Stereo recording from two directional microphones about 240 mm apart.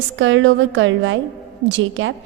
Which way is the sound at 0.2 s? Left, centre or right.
Right.